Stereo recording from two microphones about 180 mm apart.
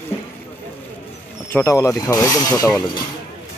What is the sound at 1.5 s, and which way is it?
Speech, 15° left (ahead or behind).